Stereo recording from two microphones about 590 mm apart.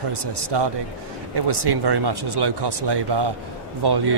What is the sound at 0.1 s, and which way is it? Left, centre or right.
Speech, right.